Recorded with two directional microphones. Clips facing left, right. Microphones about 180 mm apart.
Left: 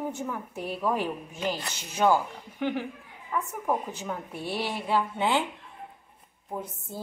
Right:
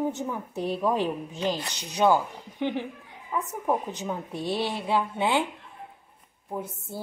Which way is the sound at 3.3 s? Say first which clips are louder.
Right 2 dB; 15° right (ahead or behind).